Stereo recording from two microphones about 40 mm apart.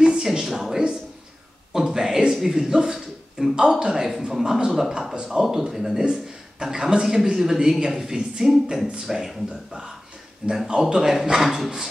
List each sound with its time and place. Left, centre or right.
0.0 s a sound: centre
2.7 s a man's voice: centre
5.1 s speech: right
5.4 s a man's voice: centre
10.4 s speech: right
10.9 s a man's voice: centre